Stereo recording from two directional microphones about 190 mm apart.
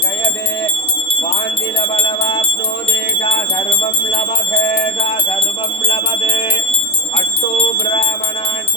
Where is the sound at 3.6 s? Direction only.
30° left (ahead or behind).